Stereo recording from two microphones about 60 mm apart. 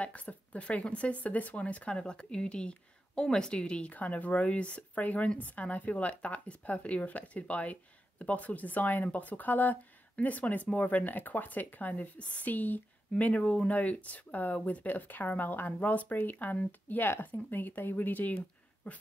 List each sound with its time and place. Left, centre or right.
0.0 s a woman's voice: left